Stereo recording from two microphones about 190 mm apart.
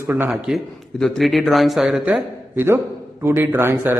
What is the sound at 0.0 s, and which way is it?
A man's voice, 10° right (ahead or behind).